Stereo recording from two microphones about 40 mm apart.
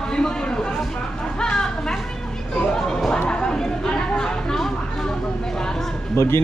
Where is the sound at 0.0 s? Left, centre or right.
Centre.